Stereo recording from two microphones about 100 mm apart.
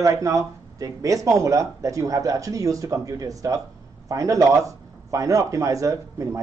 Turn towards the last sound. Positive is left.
turn(degrees=-30)  # may be behind; listen again after turning